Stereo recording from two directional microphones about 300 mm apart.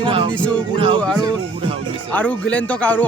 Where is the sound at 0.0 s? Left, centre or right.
Centre.